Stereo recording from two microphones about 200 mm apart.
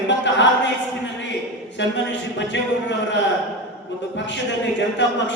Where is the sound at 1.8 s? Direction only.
65° left (ahead or behind).